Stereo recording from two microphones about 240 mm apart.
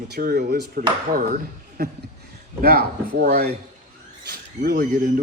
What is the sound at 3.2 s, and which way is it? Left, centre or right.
Speech, right.